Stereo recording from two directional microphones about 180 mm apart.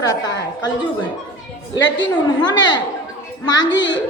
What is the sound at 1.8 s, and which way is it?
Speech, 90° left.